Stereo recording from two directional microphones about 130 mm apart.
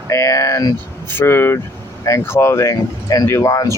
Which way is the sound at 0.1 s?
25° left (ahead or behind).